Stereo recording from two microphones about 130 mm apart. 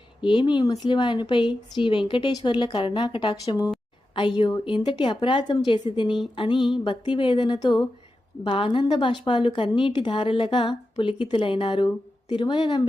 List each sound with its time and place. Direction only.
0.2 s speech: 40° left (ahead or behind)